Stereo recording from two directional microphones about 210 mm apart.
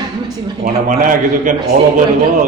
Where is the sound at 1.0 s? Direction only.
40° right (ahead or behind).